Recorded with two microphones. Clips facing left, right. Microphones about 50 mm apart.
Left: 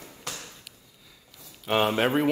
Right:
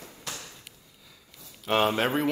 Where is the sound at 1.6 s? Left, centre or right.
Centre.